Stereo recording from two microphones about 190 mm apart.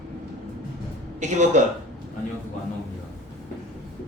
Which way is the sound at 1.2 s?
40° right (ahead or behind).